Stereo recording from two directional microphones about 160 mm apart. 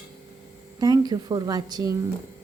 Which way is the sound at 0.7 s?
25° right (ahead or behind).